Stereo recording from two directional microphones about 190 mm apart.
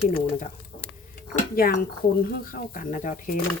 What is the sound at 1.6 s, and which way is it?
Speech, 50° left (ahead or behind).